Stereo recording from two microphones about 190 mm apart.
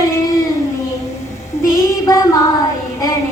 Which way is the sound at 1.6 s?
15° left (ahead or behind).